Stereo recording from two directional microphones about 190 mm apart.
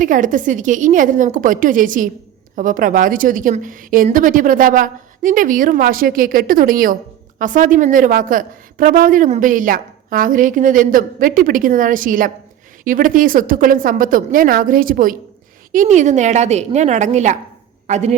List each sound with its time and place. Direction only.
0.0 s a woman's voice: 45° right (ahead or behind)